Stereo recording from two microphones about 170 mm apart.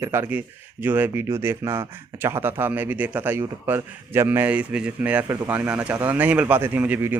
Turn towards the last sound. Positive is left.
turn(degrees=-10)  # may be behind; listen again after turning